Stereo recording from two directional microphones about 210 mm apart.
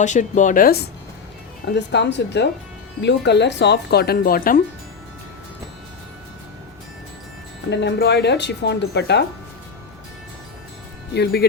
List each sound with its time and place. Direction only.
0.0 s speech: 35° left (ahead or behind)
7.7 s speech: 55° left (ahead or behind)
11.1 s speech: 50° left (ahead or behind)